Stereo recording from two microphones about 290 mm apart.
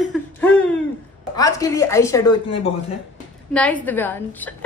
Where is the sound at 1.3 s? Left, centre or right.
Centre.